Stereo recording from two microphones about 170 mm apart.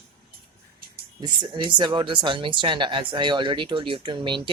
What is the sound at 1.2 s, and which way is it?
Speech, 25° right (ahead or behind).